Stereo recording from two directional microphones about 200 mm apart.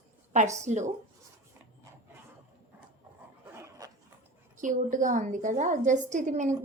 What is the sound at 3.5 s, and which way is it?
Dog, 15° right (ahead or behind).